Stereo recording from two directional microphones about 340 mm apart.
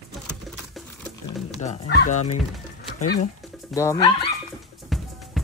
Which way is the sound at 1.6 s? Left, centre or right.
Centre.